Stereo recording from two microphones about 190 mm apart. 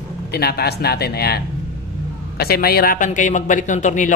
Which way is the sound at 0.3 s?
55° left (ahead or behind).